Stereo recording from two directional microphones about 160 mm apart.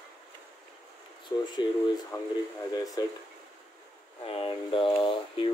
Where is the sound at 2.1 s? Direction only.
20° left (ahead or behind).